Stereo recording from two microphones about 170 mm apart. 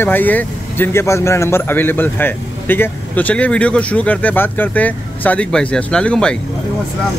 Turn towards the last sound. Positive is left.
turn(degrees=5)  # may be behind; listen again after turning